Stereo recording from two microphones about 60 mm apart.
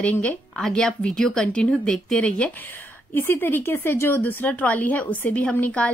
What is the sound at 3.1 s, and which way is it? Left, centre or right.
A woman's voice, left.